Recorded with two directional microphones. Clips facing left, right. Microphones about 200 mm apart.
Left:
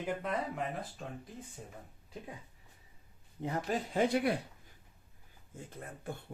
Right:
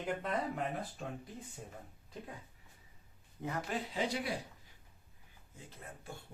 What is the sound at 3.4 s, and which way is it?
Speech, 30° left (ahead or behind).